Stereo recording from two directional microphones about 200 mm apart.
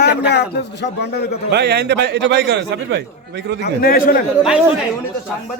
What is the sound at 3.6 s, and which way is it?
Speech, 45° left (ahead or behind).